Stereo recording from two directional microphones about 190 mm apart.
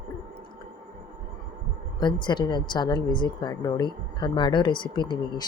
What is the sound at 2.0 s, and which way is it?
A woman's voice, 25° left (ahead or behind).